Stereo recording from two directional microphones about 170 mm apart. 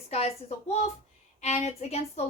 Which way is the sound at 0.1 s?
40° left (ahead or behind).